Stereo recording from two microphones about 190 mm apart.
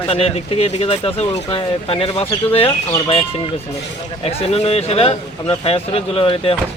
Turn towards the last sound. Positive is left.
turn(degrees=30)  # may be behind; listen again after turning